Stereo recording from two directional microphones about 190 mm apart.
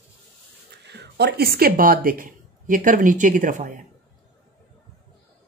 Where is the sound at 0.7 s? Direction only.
65° right (ahead or behind); by 3.8 s 45° right (ahead or behind).